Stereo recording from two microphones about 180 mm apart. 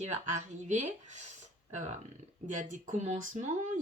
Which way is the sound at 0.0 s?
40° right (ahead or behind).